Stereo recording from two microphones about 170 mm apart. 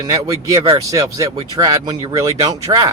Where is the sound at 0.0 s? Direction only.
20° right (ahead or behind).